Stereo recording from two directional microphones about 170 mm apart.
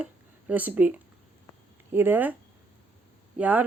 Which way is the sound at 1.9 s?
10° right (ahead or behind).